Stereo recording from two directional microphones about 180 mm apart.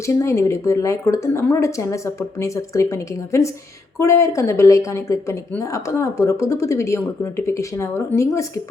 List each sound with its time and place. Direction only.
0.2 s a woman's voice: 15° left (ahead or behind)